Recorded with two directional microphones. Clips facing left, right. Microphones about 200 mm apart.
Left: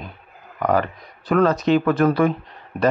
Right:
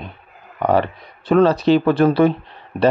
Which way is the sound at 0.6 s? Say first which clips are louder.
Right 3 dB; 30° right (ahead or behind).